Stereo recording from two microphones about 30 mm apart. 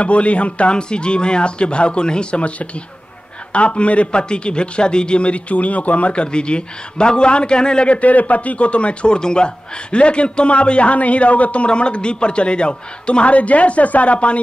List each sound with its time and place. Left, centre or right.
0.0 s speech: left
0.7 s a man's voice: left
3.5 s a man's voice: left
6.1 s a man's voice: left
7.9 s a man's voice: left